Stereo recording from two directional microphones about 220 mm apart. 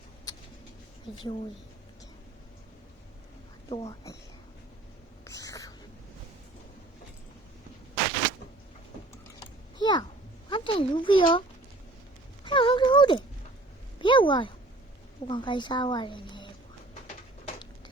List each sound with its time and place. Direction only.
1.1 s a woman's voice: 20° left (ahead or behind)
3.7 s speech: 30° left (ahead or behind)
5.2 s whispering: 15° left (ahead or behind)
9.4 s typing: 20° left (ahead or behind)
10.5 s a child's voice: 25° left (ahead or behind)
12.5 s a sound: 20° left (ahead or behind)
14.0 s a woman's voice: 20° left (ahead or behind)